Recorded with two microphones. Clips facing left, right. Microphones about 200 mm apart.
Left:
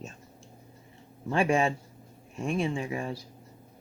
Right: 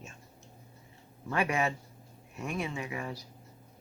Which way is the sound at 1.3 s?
30° left (ahead or behind).